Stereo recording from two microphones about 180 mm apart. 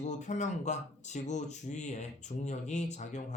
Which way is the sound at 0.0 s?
40° left (ahead or behind).